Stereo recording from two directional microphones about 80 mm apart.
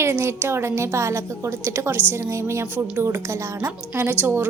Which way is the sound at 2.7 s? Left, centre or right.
Right.